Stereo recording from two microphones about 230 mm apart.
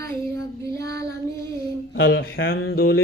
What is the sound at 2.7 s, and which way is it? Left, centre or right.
Music, left.